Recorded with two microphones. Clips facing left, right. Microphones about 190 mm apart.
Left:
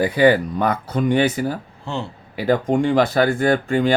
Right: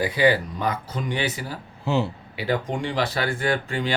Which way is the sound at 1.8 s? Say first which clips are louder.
Right 7 dB; 5° right (ahead or behind).